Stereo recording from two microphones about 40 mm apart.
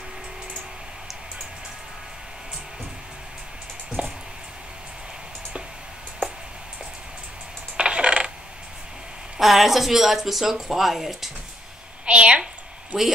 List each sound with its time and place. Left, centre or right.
4.0 s a sound: right
7.7 s coin: right
9.4 s speech: centre
12.1 s a woman's voice: right